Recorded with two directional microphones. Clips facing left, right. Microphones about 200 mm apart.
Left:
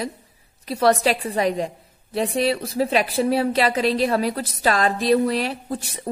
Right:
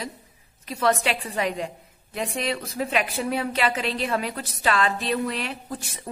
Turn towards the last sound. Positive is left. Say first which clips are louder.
# left 6 dB
turn(degrees=35)  # may be behind; listen again after turning